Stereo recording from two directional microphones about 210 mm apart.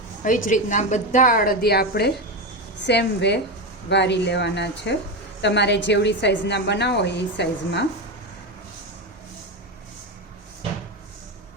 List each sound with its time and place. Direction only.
0.3 s a woman's voice: 40° left (ahead or behind)